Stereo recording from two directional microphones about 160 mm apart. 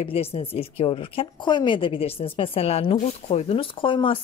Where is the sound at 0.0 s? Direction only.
40° left (ahead or behind).